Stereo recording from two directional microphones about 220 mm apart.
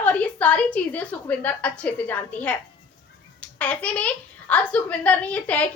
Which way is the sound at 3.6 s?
5° left (ahead or behind).